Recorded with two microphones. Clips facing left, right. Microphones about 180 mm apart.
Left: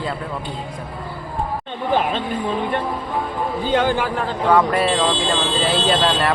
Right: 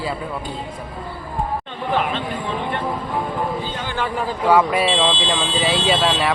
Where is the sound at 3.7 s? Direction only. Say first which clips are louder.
Left 11 dB; 70° left (ahead or behind).